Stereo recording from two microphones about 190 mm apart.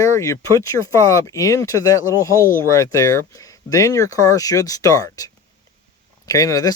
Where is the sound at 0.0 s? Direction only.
15° left (ahead or behind).